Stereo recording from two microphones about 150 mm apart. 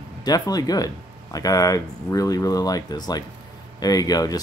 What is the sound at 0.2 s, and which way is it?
Speech, 25° left (ahead or behind).